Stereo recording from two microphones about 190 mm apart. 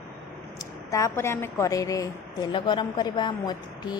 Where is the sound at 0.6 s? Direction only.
15° left (ahead or behind).